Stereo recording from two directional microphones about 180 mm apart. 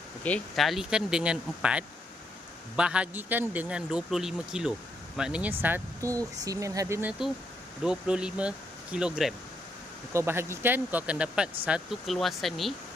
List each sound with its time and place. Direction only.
0.2 s a man's voice: 5° left (ahead or behind)